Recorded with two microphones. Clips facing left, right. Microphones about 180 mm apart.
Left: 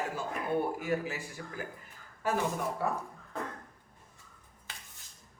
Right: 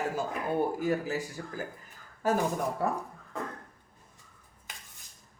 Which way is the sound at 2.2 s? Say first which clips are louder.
Right 4 dB; 40° right (ahead or behind).